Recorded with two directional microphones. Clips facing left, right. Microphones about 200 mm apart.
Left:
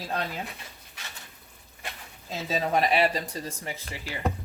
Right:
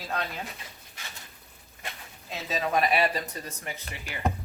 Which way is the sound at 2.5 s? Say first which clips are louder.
Left 1 dB; 30° left (ahead or behind).